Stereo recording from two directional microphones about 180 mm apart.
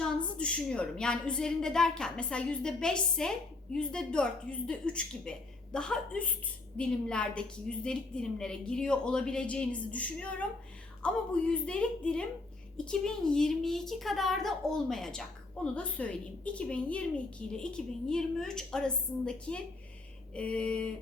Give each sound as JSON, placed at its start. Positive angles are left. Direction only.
{"t": 0.3, "sound": "a woman's voice", "side_deg": 5}